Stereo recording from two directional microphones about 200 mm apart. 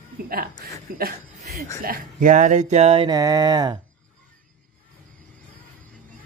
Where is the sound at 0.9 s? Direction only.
45° right (ahead or behind).